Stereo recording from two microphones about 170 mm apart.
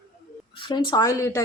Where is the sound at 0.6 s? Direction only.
30° left (ahead or behind).